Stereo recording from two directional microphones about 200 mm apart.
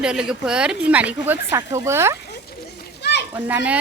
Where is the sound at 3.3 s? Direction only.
10° right (ahead or behind).